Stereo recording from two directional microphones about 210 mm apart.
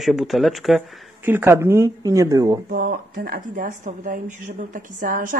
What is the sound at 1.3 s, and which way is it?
Speech, 10° right (ahead or behind).